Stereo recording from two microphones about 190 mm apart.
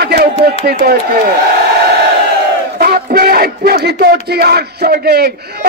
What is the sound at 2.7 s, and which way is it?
A man's voice, 55° right (ahead or behind).